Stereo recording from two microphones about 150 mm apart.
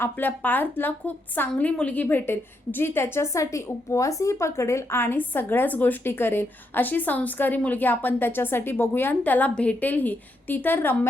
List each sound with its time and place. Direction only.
0.0 s a woman's voice: 10° left (ahead or behind)